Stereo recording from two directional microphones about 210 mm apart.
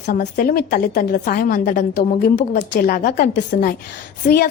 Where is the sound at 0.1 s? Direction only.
40° left (ahead or behind).